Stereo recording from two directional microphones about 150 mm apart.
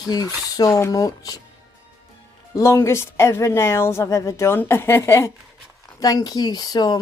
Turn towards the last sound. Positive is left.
turn(degrees=25)  # may be behind; listen again after turning